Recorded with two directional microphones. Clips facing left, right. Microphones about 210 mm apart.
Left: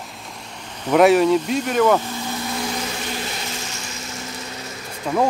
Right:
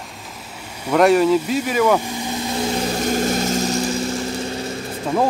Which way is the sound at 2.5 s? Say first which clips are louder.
Right 5 dB; 30° right (ahead or behind).